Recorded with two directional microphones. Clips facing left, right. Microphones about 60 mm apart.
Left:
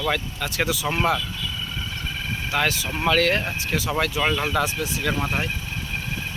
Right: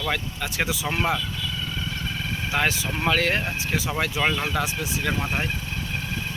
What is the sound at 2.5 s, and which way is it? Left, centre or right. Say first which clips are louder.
Speech: left 1 dB; centre.